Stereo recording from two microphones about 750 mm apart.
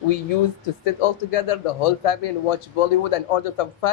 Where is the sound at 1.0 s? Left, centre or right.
Left.